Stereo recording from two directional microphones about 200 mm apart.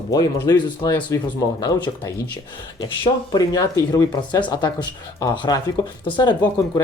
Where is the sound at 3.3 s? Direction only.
15° left (ahead or behind).